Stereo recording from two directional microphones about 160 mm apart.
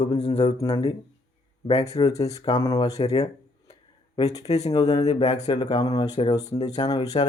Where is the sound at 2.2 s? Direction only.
20° left (ahead or behind).